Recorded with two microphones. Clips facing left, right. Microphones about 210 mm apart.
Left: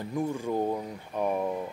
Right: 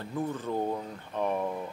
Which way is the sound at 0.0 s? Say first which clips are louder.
Left 3 dB; 15° left (ahead or behind).